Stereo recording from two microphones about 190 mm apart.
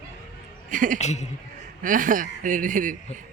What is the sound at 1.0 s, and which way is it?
Speech, 35° left (ahead or behind).